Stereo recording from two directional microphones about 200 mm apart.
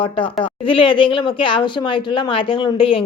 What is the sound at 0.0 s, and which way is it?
Speech, 25° left (ahead or behind).